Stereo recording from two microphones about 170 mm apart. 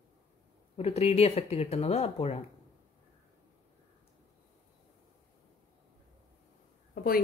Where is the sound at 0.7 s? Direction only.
35° left (ahead or behind).